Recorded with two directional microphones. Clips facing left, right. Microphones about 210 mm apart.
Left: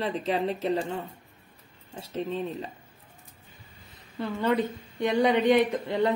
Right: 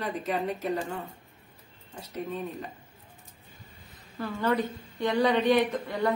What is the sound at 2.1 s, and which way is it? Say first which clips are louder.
Speech: left 3 dB; 30° left (ahead or behind).